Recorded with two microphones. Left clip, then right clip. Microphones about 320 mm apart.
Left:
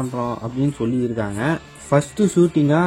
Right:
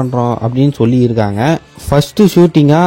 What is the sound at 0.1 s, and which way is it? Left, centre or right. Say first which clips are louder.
Speech: right 10 dB; right.